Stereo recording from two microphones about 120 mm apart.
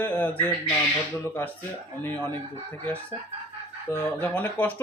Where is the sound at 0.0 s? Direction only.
15° left (ahead or behind).